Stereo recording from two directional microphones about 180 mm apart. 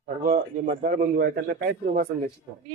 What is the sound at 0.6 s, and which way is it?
A man's voice, 60° right (ahead or behind).